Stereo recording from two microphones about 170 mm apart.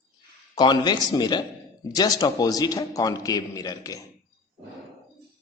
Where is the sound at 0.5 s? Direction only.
25° left (ahead or behind).